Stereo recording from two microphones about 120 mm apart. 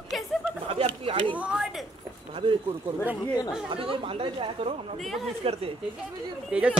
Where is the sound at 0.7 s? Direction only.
50° right (ahead or behind).